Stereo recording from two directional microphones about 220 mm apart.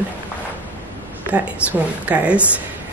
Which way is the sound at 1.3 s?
5° right (ahead or behind).